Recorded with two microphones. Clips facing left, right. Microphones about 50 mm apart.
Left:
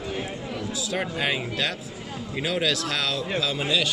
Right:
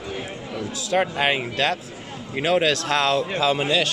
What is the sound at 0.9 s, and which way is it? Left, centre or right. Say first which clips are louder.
Speech: right 7 dB; right.